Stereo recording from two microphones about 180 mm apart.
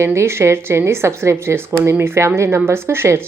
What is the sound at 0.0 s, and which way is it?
A woman's voice, 15° right (ahead or behind).